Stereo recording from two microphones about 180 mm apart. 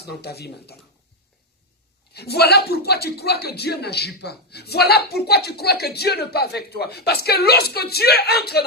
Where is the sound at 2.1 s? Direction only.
65° left (ahead or behind).